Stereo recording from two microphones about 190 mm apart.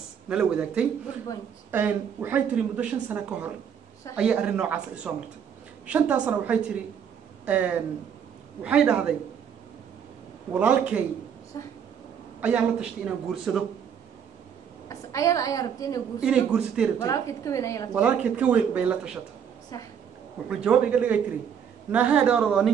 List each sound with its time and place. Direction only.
0.3 s a man's voice: 5° right (ahead or behind)
10.5 s speech: 5° right (ahead or behind)
11.5 s a woman's voice: 15° left (ahead or behind)
12.4 s a man's voice: 5° right (ahead or behind)
14.9 s a woman's voice: 15° left (ahead or behind)
16.2 s a man's voice: 5° right (ahead or behind)
17.0 s a woman's voice: 15° left (ahead or behind)
17.9 s speech: 10° right (ahead or behind)
19.7 s a woman's voice: 20° left (ahead or behind)
20.4 s a man's voice: 5° right (ahead or behind)